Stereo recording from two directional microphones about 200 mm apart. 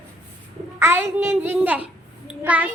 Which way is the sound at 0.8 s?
15° right (ahead or behind).